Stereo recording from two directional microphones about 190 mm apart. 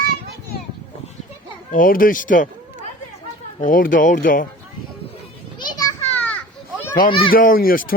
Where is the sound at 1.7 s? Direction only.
45° left (ahead or behind).